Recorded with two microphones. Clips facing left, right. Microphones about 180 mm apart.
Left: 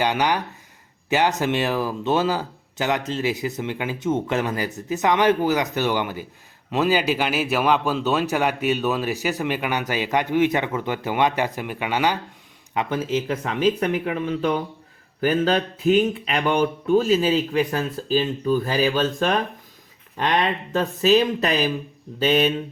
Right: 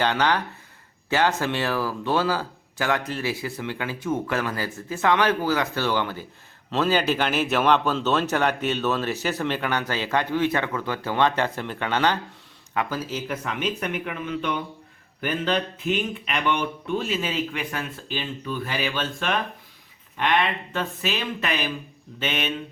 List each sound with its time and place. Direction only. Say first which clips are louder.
0.0 s a man's voice: left 1 dB; 15° left (ahead or behind)
12.7 s speech: left 4 dB; 20° left (ahead or behind)